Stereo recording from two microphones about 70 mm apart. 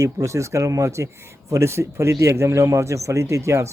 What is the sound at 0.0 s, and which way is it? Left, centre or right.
Speech, right.